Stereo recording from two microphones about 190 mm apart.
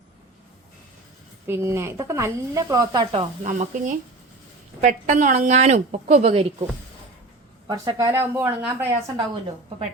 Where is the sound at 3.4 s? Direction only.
40° right (ahead or behind).